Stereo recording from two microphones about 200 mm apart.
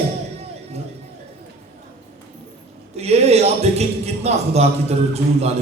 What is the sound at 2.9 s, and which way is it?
A man's voice, 30° right (ahead or behind).